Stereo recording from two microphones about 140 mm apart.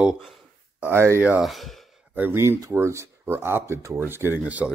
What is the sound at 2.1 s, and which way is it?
Speech, 15° right (ahead or behind).